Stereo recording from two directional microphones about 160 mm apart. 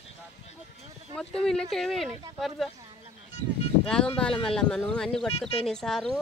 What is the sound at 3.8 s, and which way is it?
Speech, 5° left (ahead or behind).